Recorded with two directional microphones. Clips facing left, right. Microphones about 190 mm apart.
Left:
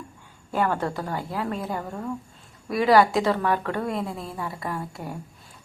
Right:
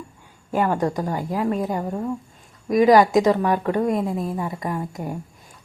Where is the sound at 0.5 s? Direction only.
15° right (ahead or behind).